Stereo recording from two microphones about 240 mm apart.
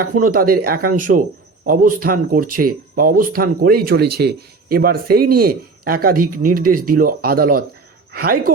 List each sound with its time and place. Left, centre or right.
0.0 s speech: right